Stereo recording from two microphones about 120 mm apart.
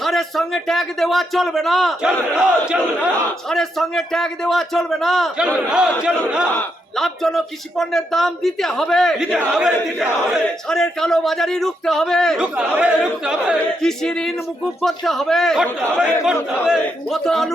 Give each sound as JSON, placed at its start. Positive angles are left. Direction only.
{"t": 0.0, "sound": "speech", "side_deg": 0}
{"t": 6.5, "sound": "a man's voice", "side_deg": 15}
{"t": 7.0, "sound": "speech", "side_deg": 0}
{"t": 12.4, "sound": "speech", "side_deg": -10}